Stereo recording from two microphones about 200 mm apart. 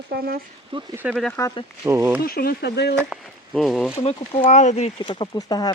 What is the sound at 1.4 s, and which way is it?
Speech, 15° left (ahead or behind).